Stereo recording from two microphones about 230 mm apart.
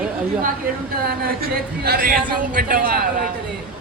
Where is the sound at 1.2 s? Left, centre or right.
Right.